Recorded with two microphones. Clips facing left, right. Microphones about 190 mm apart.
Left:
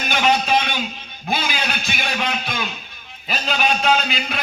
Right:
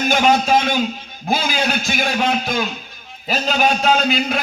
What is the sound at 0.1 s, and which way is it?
A man's voice, 45° right (ahead or behind).